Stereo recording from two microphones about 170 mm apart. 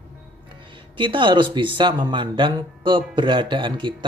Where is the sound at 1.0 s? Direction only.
30° right (ahead or behind).